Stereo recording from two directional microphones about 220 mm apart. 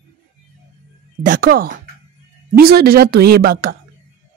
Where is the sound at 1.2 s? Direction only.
40° right (ahead or behind).